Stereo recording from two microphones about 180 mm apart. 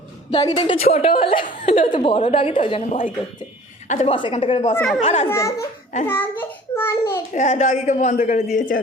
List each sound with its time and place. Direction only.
0.3 s a woman's voice: 25° left (ahead or behind)
1.5 s a woman's voice: 40° left (ahead or behind)
4.7 s a child's voice: 10° left (ahead or behind)
5.0 s speech: 35° left (ahead or behind)
5.3 s a child's voice: 15° left (ahead or behind)
7.3 s a man's voice: 40° left (ahead or behind)